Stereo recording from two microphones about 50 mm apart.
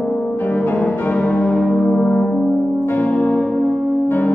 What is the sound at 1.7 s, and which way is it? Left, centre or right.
Brass instrument, centre.